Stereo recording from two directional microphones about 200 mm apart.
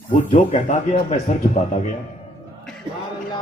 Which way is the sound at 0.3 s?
35° left (ahead or behind).